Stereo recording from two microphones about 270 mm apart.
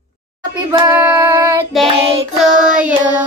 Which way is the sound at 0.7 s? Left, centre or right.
Centre.